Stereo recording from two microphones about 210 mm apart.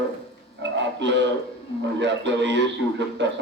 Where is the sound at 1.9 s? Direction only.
55° right (ahead or behind).